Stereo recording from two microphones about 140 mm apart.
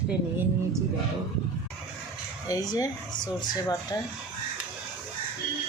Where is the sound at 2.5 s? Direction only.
25° left (ahead or behind).